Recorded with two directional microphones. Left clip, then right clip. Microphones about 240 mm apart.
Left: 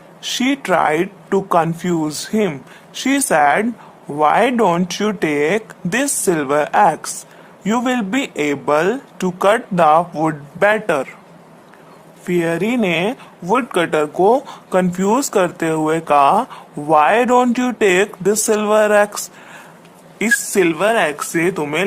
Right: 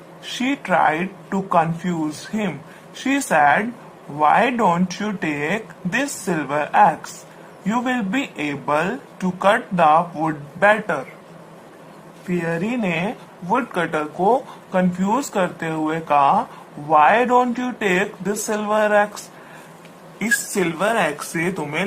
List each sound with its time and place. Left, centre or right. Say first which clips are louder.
0.2 s speech: left 5 dB; left
12.3 s speech: left 6 dB; left
20.1 s speech: left 5 dB; left